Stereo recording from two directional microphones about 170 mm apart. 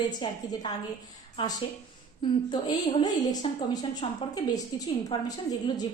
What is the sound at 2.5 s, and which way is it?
A woman's voice, 25° left (ahead or behind).